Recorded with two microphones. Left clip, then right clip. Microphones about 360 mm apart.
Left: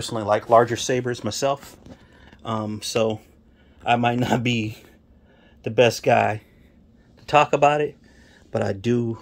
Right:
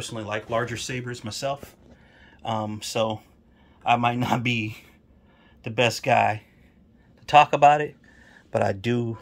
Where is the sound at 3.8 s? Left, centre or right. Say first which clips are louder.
Left 1 dB; centre.